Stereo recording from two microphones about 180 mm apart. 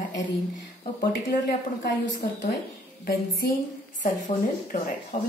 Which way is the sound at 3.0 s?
55° left (ahead or behind).